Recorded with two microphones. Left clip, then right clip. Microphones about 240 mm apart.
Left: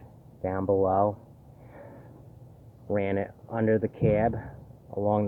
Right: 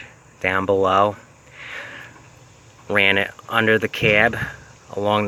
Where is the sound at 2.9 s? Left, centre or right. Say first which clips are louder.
Right 11 dB; centre.